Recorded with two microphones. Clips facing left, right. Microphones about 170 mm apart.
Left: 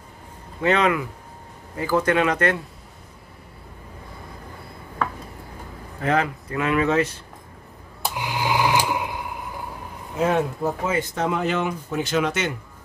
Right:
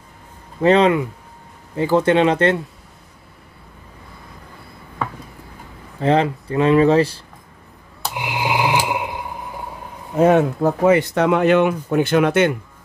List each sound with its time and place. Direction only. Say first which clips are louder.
0.6 s speech: right 6 dB; 30° right (ahead or behind)
5.9 s speech: right 6 dB; 30° right (ahead or behind)
8.1 s a sound: right 2 dB; 15° right (ahead or behind)
10.1 s speech: right 7 dB; 60° right (ahead or behind)